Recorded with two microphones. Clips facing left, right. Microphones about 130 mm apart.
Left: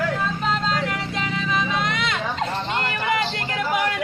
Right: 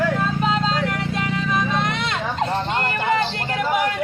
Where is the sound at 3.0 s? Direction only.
30° right (ahead or behind).